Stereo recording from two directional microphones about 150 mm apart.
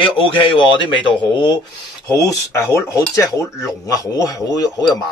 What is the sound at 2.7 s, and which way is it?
Speech, 20° left (ahead or behind).